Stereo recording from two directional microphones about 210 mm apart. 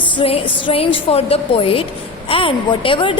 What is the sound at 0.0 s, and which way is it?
A woman's voice, 25° left (ahead or behind).